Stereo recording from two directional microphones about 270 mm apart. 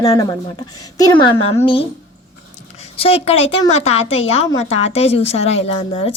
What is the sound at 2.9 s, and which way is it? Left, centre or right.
A woman's voice, left.